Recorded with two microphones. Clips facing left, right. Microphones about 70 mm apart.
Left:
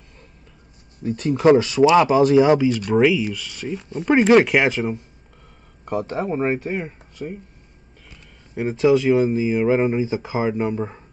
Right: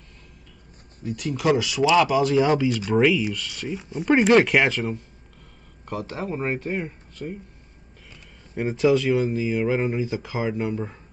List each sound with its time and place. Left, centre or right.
1.0 s speech: left
2.9 s speech: centre
4.6 s speech: centre
8.5 s speech: centre
8.9 s speech: centre